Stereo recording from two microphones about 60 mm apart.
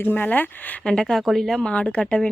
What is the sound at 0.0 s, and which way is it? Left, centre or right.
Speech, left.